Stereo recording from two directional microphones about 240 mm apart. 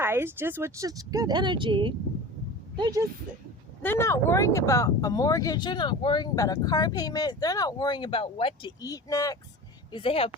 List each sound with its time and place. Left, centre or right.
0.0 s speech: centre
3.8 s speech: centre